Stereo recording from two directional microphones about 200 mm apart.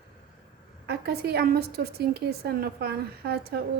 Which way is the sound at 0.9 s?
50° right (ahead or behind).